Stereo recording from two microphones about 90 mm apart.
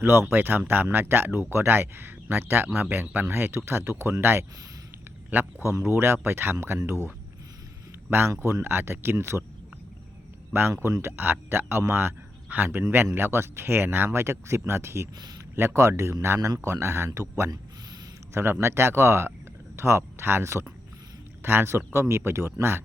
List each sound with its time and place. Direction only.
0.0 s speech: 25° right (ahead or behind)
8.1 s speech: 25° right (ahead or behind)
10.5 s speech: 25° right (ahead or behind)